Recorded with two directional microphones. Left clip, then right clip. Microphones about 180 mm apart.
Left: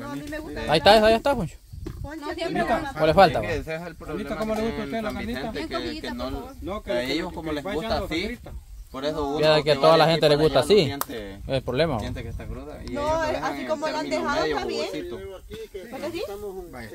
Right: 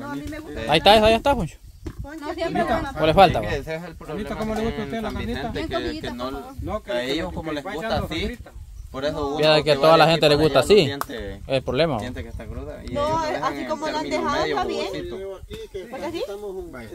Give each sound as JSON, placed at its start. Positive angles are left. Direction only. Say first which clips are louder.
{"t": 0.7, "sound": "a man's voice", "louder": "right 1 dB", "side_deg": -10}
{"t": 3.4, "sound": "speech", "louder": "right 1 dB", "side_deg": -40}
{"t": 4.3, "sound": "speech", "louder": "even", "side_deg": -25}
{"t": 7.9, "sound": "speech", "louder": "right 3 dB", "side_deg": -25}
{"t": 9.4, "sound": "a man's voice", "louder": "right 2 dB", "side_deg": -10}
{"t": 10.9, "sound": "speech", "louder": "right 3 dB", "side_deg": -25}
{"t": 11.5, "sound": "a man's voice", "louder": "right 3 dB", "side_deg": -10}
{"t": 12.9, "sound": "speech", "louder": "right 2 dB", "side_deg": -35}